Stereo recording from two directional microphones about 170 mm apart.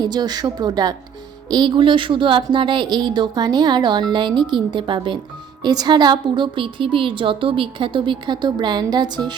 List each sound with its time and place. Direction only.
0.0 s a woman's voice: 25° right (ahead or behind)